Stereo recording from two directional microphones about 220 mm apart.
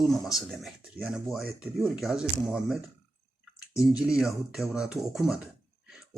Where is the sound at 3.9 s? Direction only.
5° right (ahead or behind).